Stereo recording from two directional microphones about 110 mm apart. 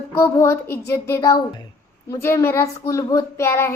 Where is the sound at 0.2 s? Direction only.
25° left (ahead or behind).